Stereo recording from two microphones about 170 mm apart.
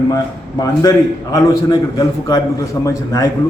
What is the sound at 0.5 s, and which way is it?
A man's voice, 20° left (ahead or behind).